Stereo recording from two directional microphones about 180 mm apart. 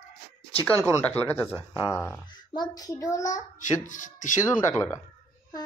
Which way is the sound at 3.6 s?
45° left (ahead or behind).